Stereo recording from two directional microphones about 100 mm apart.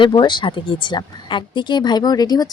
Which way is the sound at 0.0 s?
50° left (ahead or behind).